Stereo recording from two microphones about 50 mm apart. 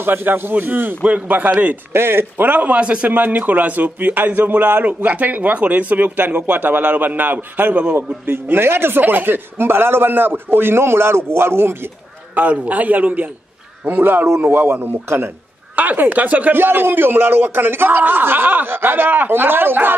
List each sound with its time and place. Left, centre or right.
0.0 s speech: right
1.9 s speech: right
2.4 s a man's voice: right
3.2 s speech: right
12.4 s speech: right
15.7 s speech: right